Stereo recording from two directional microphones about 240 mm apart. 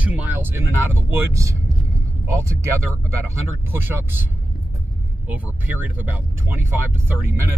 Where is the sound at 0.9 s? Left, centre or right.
Centre.